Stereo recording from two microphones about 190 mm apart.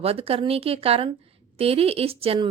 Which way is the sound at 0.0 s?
30° right (ahead or behind).